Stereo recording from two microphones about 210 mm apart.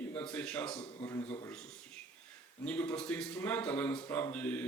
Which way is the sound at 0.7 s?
20° left (ahead or behind).